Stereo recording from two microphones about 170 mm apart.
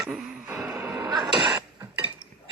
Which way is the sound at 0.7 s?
15° right (ahead or behind).